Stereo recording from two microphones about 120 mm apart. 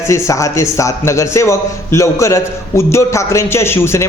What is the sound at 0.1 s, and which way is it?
A man's voice, 25° left (ahead or behind).